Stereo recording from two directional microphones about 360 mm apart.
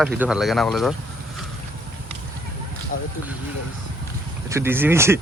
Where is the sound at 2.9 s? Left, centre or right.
Left.